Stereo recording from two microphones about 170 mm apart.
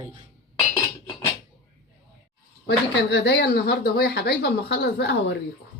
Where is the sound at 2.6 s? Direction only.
85° left.